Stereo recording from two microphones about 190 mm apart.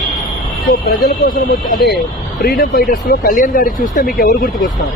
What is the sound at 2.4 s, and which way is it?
Speech, 50° left (ahead or behind).